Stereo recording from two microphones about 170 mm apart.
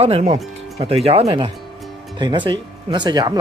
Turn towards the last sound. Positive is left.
turn(degrees=-25)  # may be behind; listen again after turning